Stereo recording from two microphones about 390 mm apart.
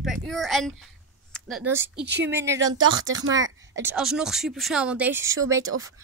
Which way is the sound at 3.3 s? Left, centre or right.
Centre.